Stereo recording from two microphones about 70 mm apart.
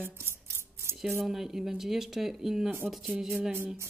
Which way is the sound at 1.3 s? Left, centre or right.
Centre.